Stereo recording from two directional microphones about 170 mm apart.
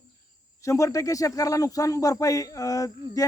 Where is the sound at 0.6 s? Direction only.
20° left (ahead or behind).